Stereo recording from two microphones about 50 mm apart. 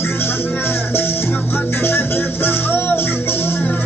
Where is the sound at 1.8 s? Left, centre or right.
Left.